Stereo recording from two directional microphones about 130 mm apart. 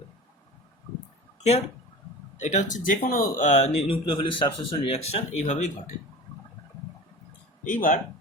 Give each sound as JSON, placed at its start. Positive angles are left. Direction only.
{"t": 2.4, "sound": "speech", "side_deg": 65}
{"t": 7.6, "sound": "speech", "side_deg": 90}